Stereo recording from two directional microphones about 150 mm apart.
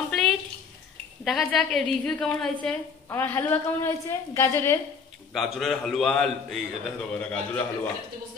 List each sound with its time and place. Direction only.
0.1 s a sound: centre (ahead or behind)
1.2 s a man's voice: centre (ahead or behind); by 4.7 s 20° left (ahead or behind)
5.3 s a man's voice: centre (ahead or behind)